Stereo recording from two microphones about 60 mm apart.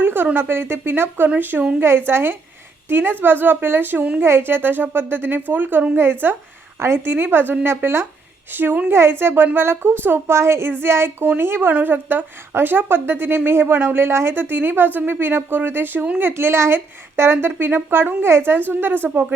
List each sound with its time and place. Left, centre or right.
0.0 s a sound: right
0.3 s a woman's voice: right
10.3 s a woman's voice: right
16.3 s a woman's voice: right